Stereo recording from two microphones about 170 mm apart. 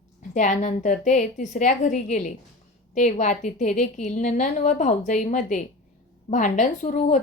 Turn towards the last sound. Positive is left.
turn(degrees=45)  # may be behind; listen again after turning